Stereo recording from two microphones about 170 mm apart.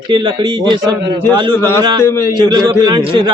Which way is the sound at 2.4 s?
25° right (ahead or behind).